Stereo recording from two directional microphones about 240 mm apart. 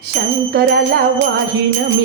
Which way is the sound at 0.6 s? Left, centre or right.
Right.